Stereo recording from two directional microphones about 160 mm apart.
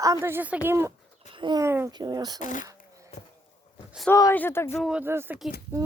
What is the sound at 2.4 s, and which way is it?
Speech, 55° left (ahead or behind).